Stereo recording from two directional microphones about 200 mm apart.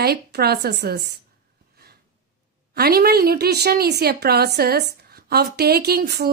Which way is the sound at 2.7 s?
50° right (ahead or behind).